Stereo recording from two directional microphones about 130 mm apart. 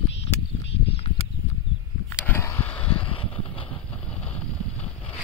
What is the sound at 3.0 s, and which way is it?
Vehicle, 45° left (ahead or behind).